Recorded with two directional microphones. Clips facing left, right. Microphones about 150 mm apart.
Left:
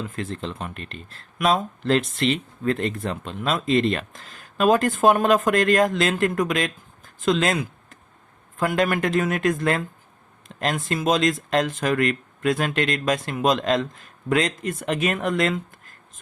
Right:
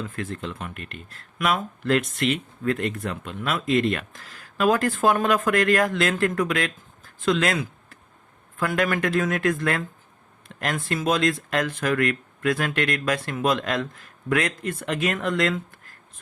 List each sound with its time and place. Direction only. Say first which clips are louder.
0.2 s speech: left 2 dB; 25° left (ahead or behind)